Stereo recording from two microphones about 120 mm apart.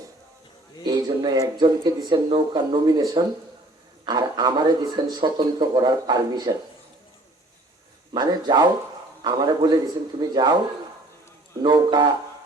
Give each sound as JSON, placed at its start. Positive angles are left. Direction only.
{"t": 0.9, "sound": "a man's voice", "side_deg": -35}
{"t": 8.1, "sound": "a man's voice", "side_deg": -35}
{"t": 11.6, "sound": "a man's voice", "side_deg": -35}